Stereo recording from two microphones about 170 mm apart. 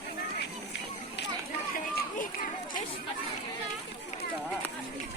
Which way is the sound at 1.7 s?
55° left (ahead or behind).